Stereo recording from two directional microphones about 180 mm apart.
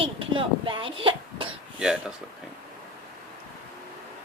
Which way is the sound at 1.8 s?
Centre (ahead or behind).